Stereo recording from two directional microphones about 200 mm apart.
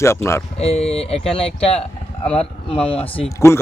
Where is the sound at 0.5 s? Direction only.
30° left (ahead or behind).